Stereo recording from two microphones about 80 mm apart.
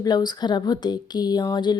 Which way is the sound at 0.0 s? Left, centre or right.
Left.